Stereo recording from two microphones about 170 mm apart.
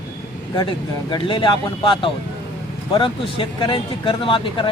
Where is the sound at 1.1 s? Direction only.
30° left (ahead or behind).